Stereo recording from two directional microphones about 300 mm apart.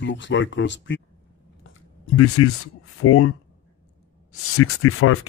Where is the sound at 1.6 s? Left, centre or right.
Left.